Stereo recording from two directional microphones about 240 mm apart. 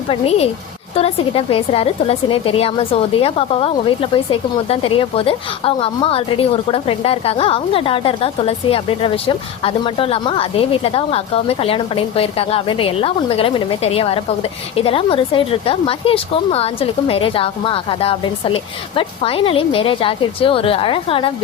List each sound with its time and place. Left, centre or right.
0.1 s a woman's voice: left